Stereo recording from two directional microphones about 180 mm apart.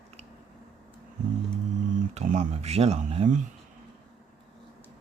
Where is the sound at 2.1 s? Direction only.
40° right (ahead or behind).